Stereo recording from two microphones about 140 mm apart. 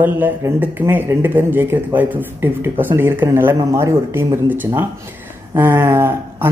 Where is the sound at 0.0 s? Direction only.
15° right (ahead or behind).